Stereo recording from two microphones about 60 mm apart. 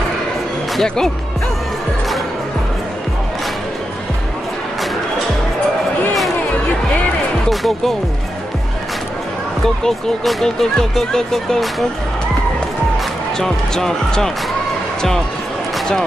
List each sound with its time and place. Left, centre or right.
0.8 s speech: centre
7.4 s music: centre
9.8 s speech: centre
13.4 s speech: centre